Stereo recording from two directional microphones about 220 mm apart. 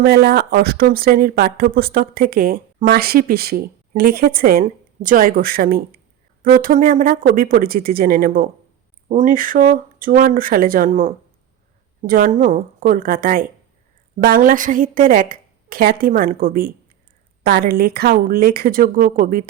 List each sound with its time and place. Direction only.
0.0 s a woman's voice: 45° right (ahead or behind)